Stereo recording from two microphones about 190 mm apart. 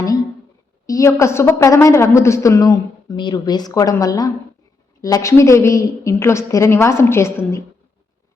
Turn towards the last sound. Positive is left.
turn(degrees=15)  # may be behind; listen again after turning